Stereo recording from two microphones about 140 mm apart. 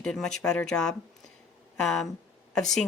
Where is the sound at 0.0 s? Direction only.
5° left (ahead or behind).